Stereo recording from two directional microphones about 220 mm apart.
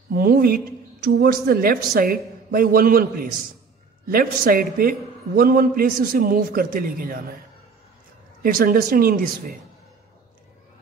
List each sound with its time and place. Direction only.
0.1 s a woman's voice: 40° right (ahead or behind)
8.4 s a man's voice: 40° right (ahead or behind)